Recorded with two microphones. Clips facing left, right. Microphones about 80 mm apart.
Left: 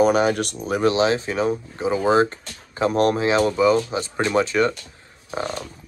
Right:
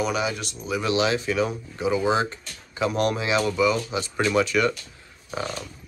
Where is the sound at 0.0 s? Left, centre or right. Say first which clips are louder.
Left 8 dB; left.